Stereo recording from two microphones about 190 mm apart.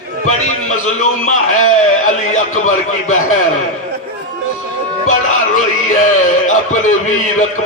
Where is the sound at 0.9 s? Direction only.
40° left (ahead or behind).